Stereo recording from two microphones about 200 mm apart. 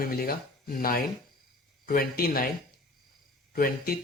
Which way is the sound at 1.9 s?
45° left (ahead or behind).